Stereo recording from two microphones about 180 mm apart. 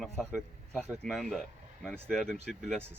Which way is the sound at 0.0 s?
Centre (ahead or behind).